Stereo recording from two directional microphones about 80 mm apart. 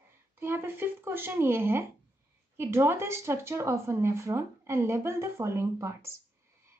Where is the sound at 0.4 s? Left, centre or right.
Right.